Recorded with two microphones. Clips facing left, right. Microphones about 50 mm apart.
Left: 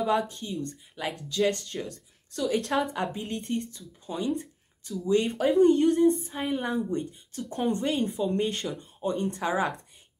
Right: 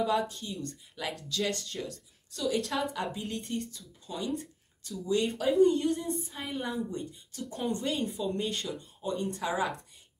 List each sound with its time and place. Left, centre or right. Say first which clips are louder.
0.0 s speech: left 2 dB; left
5.6 s speech: left 6 dB; left